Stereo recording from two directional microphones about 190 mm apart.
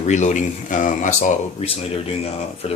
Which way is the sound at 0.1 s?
40° left (ahead or behind).